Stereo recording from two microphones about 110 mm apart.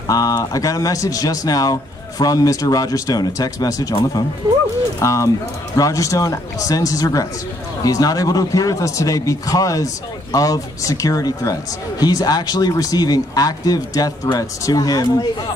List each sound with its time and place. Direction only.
0.1 s a man's voice: 35° left (ahead or behind)
5.0 s a man's voice: 30° left (ahead or behind)